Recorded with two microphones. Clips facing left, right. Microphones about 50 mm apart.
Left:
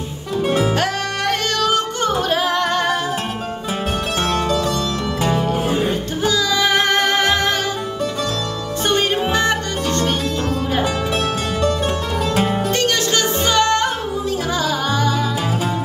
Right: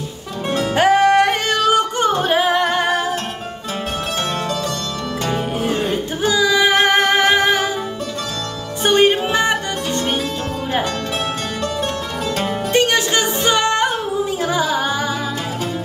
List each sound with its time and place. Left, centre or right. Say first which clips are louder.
0.7 s music: right 9 dB; right
5.3 s music: even; centre
6.2 s music: right 3 dB; centre
8.8 s music: right 4 dB; centre
12.7 s music: right 7 dB; centre